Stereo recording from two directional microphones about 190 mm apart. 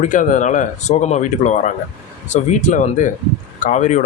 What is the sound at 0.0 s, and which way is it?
A man's voice, 40° left (ahead or behind).